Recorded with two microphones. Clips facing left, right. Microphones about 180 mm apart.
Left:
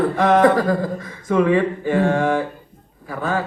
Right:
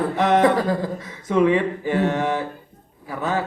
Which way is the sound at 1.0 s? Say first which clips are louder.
Even; 20° right (ahead or behind).